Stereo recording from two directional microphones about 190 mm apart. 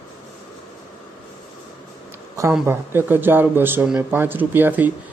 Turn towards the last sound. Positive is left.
turn(degrees=-10)  # may be behind; listen again after turning